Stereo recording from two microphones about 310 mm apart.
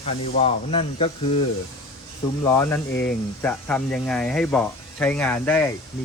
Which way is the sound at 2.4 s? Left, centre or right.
Centre.